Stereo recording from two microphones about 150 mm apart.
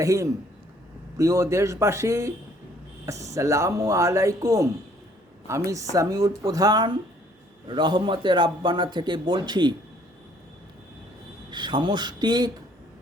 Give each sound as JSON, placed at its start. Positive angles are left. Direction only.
{"t": 0.0, "sound": "a man's voice", "side_deg": -20}
{"t": 11.5, "sound": "speech", "side_deg": -30}